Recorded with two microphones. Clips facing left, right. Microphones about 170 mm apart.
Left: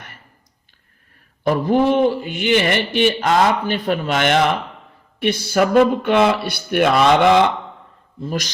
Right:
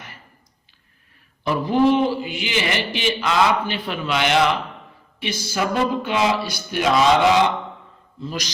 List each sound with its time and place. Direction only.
1.5 s a man's voice: 50° left (ahead or behind)
5.2 s a man's voice: 60° left (ahead or behind)